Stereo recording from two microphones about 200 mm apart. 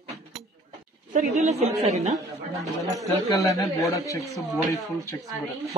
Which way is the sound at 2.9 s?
Centre (ahead or behind).